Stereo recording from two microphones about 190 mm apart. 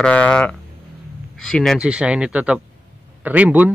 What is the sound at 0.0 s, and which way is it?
A man's voice, 5° left (ahead or behind).